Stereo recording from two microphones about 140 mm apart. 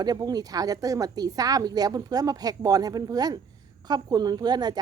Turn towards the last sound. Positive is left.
turn(degrees=-30)  # may be behind; listen again after turning